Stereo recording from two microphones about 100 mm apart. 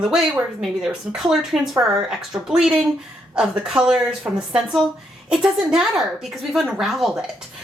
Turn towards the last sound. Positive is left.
turn(degrees=0)  # may be behind; listen again after turning